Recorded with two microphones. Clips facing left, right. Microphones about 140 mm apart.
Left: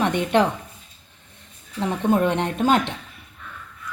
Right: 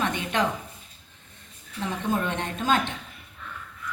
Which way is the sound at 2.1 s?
70° left (ahead or behind).